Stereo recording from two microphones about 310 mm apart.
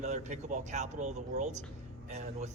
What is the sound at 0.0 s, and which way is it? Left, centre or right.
A man's voice, right.